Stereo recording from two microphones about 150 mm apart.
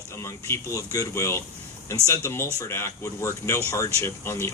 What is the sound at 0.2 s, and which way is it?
Speech, 20° left (ahead or behind).